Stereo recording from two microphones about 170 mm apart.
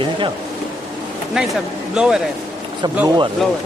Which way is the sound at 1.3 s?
5° right (ahead or behind).